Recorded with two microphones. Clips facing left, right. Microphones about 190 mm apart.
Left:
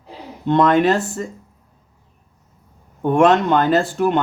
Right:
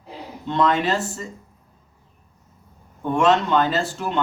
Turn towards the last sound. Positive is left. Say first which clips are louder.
# left 8 dB
turn(degrees=55)  # may be behind; listen again after turning